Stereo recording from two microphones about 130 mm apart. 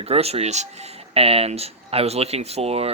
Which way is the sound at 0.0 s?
50° right (ahead or behind).